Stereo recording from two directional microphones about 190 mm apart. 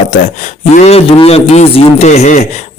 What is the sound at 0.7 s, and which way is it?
Speech, 35° left (ahead or behind).